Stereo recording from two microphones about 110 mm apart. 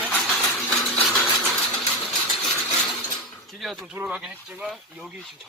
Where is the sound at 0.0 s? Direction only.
10° left (ahead or behind).